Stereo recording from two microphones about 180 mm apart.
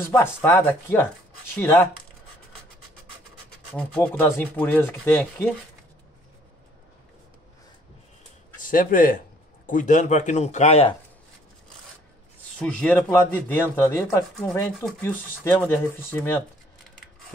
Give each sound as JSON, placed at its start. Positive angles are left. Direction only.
{"t": 0.1, "sound": "speech", "side_deg": 10}
{"t": 3.7, "sound": "speech", "side_deg": 5}
{"t": 8.5, "sound": "speech", "side_deg": 50}
{"t": 12.5, "sound": "speech", "side_deg": 5}